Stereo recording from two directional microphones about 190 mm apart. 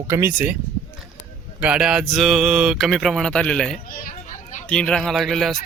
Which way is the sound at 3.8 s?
50° left (ahead or behind).